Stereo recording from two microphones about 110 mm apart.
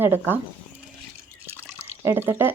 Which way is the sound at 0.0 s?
20° right (ahead or behind).